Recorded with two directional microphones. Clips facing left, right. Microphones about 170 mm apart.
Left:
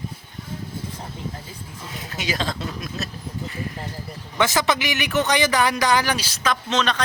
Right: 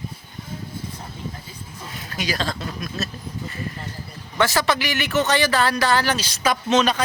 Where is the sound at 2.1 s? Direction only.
20° left (ahead or behind).